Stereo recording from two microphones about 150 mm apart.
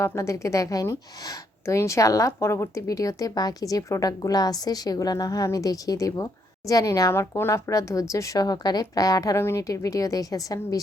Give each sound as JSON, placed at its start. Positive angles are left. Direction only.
{"t": 0.0, "sound": "a woman's voice", "side_deg": 20}